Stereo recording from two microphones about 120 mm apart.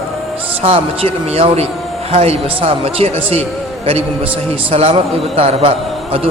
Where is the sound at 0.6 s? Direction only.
60° right (ahead or behind).